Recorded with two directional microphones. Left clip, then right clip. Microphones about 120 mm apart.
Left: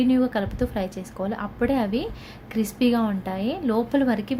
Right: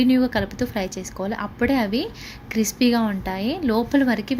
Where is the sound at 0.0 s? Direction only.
15° right (ahead or behind).